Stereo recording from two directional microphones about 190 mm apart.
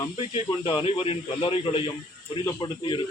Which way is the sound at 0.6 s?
25° left (ahead or behind).